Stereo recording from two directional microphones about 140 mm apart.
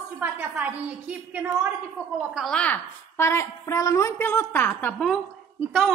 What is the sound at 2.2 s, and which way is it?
A woman's voice, centre (ahead or behind).